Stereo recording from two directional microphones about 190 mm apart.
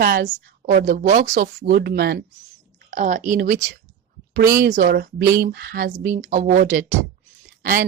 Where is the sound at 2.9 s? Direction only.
40° right (ahead or behind).